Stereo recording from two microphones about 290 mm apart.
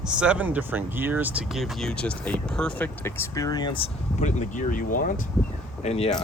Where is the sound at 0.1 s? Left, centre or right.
Centre.